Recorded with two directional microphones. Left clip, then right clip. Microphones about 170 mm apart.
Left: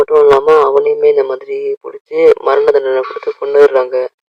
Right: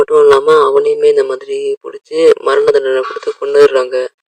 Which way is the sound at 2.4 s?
55° right (ahead or behind).